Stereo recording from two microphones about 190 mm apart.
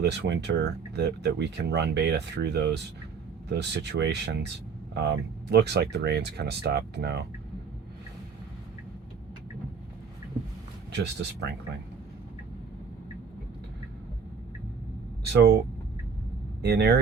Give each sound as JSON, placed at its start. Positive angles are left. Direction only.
{"t": 0.0, "sound": "speech", "side_deg": -65}
{"t": 10.9, "sound": "speech", "side_deg": -65}
{"t": 15.3, "sound": "speech", "side_deg": -60}
{"t": 16.6, "sound": "speech", "side_deg": -60}